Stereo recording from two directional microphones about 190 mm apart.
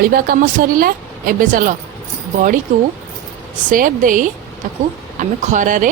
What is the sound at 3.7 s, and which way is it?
A woman's voice, 45° right (ahead or behind).